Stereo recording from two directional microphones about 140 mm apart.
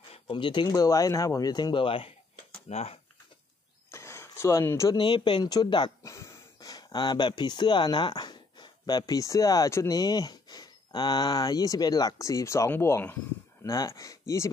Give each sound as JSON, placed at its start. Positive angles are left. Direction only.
{"t": 0.1, "sound": "speech", "side_deg": 35}
{"t": 3.9, "sound": "a sound", "side_deg": 20}
{"t": 4.9, "sound": "speech", "side_deg": 35}